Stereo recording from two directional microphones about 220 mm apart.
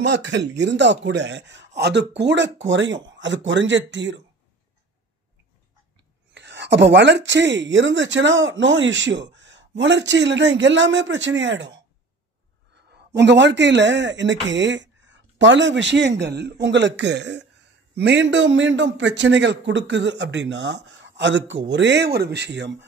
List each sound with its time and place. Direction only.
0.0 s a man's voice: 55° right (ahead or behind)
6.3 s a man's voice: 50° right (ahead or behind)